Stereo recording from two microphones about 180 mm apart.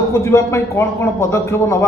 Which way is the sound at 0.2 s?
15° left (ahead or behind).